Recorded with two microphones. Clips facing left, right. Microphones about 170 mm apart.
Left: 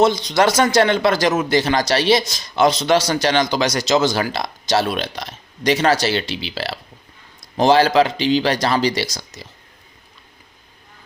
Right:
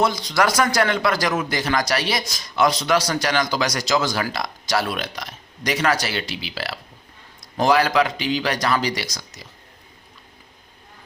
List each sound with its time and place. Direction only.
0.0 s speech: 25° left (ahead or behind)